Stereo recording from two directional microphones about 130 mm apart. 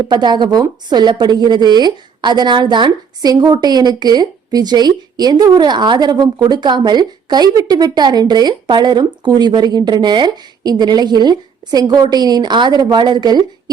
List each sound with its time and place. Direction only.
0.1 s a woman's voice: 35° right (ahead or behind)